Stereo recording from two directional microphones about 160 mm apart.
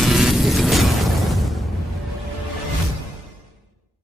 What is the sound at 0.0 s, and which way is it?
Music, centre (ahead or behind).